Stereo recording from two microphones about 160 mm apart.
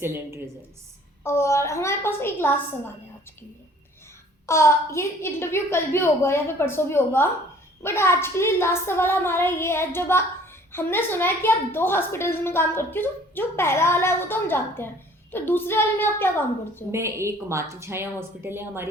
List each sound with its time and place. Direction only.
0.0 s a woman's voice: 15° right (ahead or behind)
1.2 s a woman's voice: 15° left (ahead or behind)
4.4 s a woman's voice: 15° left (ahead or behind)
16.9 s a woman's voice: 15° right (ahead or behind)